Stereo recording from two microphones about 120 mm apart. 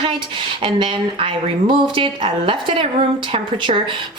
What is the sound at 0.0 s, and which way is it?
A woman's voice, 45° right (ahead or behind).